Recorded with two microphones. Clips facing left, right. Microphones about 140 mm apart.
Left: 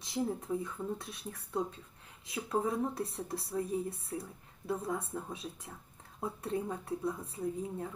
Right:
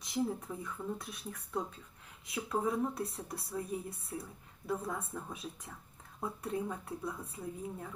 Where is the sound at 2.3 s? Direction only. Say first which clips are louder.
Left 1 dB; 25° left (ahead or behind).